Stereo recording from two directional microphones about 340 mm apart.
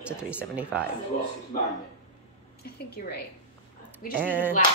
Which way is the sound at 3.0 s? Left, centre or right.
Left.